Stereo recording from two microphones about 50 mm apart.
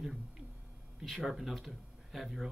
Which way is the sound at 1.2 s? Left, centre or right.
Centre.